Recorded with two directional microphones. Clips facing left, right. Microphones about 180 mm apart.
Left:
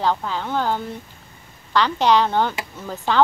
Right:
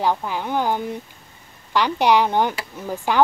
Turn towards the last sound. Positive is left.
turn(degrees=-15)  # may be behind; listen again after turning